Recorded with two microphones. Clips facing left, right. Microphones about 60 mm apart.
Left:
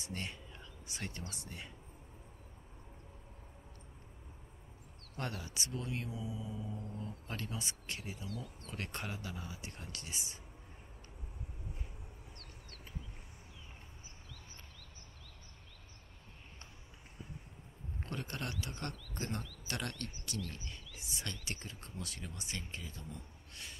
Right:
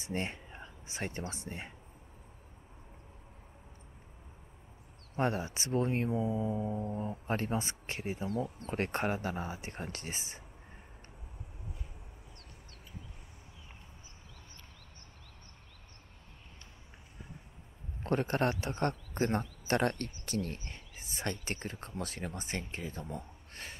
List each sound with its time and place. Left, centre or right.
0.0 s speech: right
5.1 s speech: right
18.0 s speech: right